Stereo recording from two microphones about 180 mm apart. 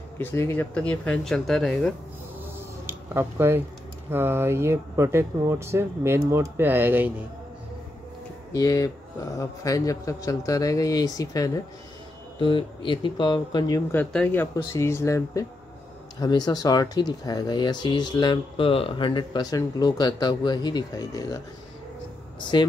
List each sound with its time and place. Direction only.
0.2 s speech: 10° left (ahead or behind)
2.9 s speech: 15° right (ahead or behind)
8.5 s speech: 20° left (ahead or behind)
12.4 s speech: 30° left (ahead or behind)
13.9 s speech: 10° left (ahead or behind)
22.5 s speech: 25° left (ahead or behind)